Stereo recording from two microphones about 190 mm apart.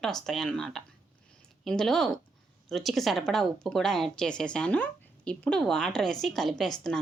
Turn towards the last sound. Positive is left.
turn(degrees=0)  # may be behind; listen again after turning